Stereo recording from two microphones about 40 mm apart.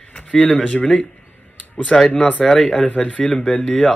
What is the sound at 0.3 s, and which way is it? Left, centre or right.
Speech, centre.